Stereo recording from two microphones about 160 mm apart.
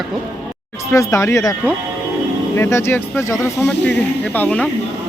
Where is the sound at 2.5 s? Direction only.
15° left (ahead or behind).